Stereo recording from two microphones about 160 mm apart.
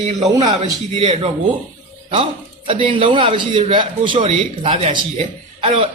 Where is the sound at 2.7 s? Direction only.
35° right (ahead or behind).